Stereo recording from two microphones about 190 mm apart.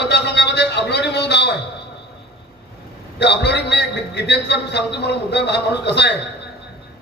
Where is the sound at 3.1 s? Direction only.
65° left (ahead or behind).